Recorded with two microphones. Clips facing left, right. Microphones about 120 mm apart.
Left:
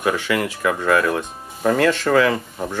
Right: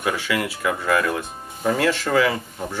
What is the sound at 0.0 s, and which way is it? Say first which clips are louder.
Speech: left 3 dB; 35° left (ahead or behind).